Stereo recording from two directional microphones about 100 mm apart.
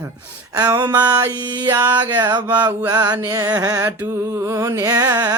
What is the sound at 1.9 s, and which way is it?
Music, 45° right (ahead or behind).